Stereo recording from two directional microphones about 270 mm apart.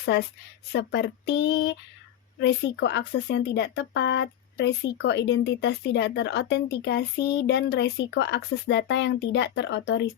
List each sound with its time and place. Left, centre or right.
0.0 s a woman's voice: left